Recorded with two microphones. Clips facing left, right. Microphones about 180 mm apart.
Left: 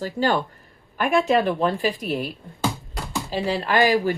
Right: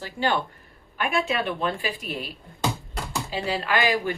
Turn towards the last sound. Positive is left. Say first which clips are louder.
# left 5 dB
turn(degrees=40)  # may be behind; listen again after turning